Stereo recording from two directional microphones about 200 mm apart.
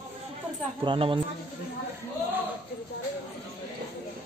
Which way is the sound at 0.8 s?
25° right (ahead or behind).